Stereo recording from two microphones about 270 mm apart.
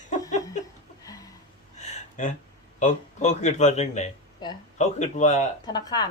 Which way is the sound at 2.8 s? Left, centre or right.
Left.